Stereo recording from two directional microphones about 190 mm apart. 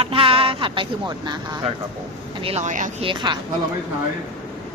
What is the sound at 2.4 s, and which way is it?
Speech, 35° right (ahead or behind).